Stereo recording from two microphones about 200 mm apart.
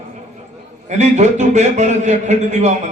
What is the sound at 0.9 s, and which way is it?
A man's voice, 35° right (ahead or behind).